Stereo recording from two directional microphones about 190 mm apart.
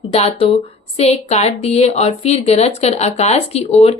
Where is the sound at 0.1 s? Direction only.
35° left (ahead or behind).